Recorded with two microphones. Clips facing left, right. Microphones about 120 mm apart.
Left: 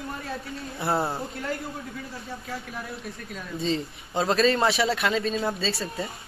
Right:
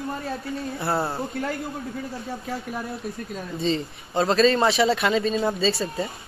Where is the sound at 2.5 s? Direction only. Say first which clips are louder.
Right 5 dB; 30° right (ahead or behind).